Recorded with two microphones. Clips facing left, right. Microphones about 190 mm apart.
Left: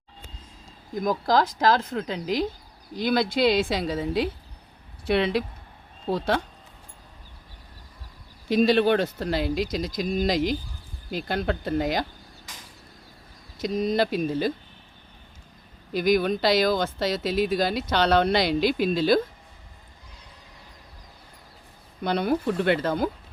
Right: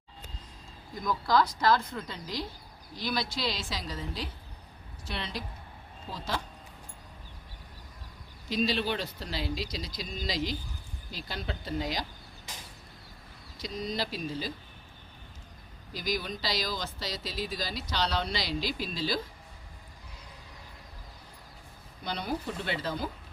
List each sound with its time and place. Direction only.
1.0 s speech: 45° left (ahead or behind)
1.6 s speech: 85° left
3.1 s speech: 55° left (ahead or behind)
8.4 s speech: 55° left (ahead or behind)
13.6 s speech: 55° left (ahead or behind)
15.9 s speech: 60° left (ahead or behind)
22.0 s speech: 60° left (ahead or behind)